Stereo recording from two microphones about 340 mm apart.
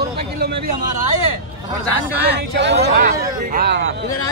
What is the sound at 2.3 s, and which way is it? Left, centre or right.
Speech, right.